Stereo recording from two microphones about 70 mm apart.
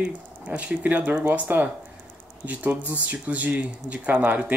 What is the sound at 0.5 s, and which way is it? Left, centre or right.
Speech, centre.